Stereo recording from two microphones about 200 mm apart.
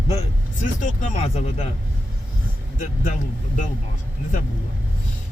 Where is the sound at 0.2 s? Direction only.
40° left (ahead or behind).